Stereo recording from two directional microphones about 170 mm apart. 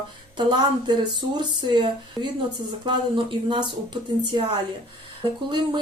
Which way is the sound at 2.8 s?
25° right (ahead or behind).